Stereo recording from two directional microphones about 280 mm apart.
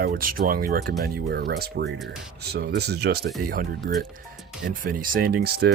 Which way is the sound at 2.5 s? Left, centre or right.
Right.